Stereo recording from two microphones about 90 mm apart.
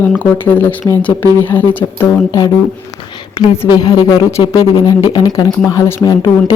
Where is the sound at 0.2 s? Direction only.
20° left (ahead or behind).